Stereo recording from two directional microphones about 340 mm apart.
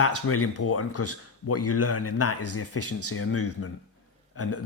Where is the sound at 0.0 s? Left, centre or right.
Left.